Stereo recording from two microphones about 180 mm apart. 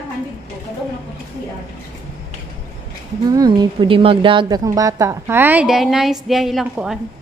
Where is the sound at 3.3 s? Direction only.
25° right (ahead or behind); by 7.0 s 5° right (ahead or behind).